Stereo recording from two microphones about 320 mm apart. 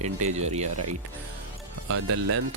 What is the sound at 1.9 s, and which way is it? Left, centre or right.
Speech, right.